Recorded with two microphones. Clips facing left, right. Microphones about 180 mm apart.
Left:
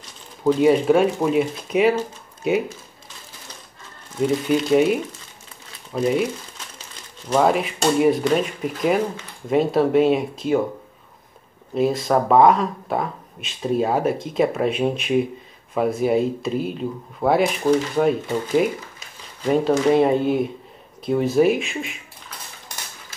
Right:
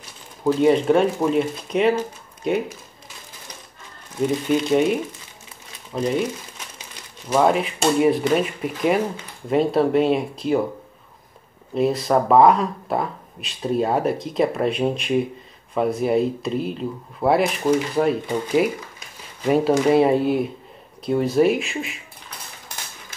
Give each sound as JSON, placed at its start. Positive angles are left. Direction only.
{"t": 0.4, "sound": "speech", "side_deg": 0}
{"t": 4.5, "sound": "speech", "side_deg": 5}
{"t": 5.9, "sound": "speech", "side_deg": 5}
{"t": 7.2, "sound": "speech", "side_deg": -5}
{"t": 11.7, "sound": "speech", "side_deg": 0}
{"t": 19.4, "sound": "speech", "side_deg": -5}